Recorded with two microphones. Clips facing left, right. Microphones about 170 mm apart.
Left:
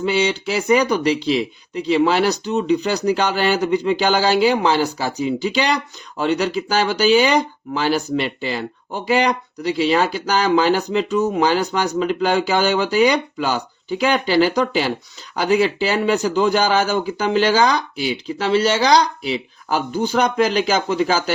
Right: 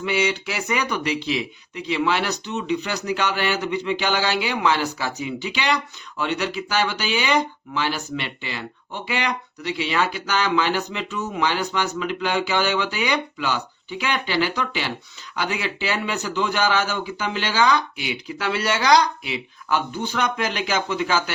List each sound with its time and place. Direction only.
0.0 s speech: 30° left (ahead or behind)